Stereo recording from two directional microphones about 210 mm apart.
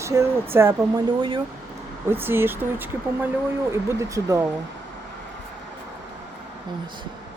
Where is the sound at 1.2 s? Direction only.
25° right (ahead or behind).